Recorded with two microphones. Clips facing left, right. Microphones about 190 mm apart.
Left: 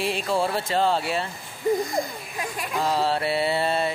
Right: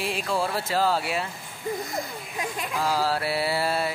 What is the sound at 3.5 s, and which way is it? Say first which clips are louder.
Music: left 2 dB; 25° left (ahead or behind).